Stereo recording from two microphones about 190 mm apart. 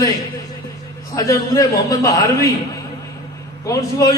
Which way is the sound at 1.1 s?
20° left (ahead or behind).